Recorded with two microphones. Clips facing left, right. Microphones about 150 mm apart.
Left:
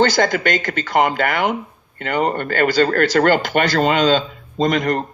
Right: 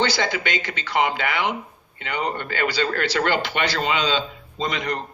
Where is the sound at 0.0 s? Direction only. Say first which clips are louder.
Left 7 dB; 45° left (ahead or behind).